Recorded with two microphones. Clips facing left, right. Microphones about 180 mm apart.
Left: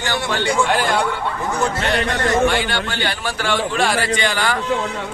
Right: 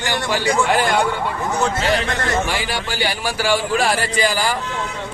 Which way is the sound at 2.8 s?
10° right (ahead or behind).